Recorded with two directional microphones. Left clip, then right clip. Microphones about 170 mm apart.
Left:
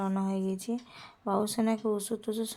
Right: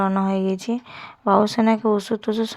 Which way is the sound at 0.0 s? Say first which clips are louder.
Right 12 dB; 15° right (ahead or behind).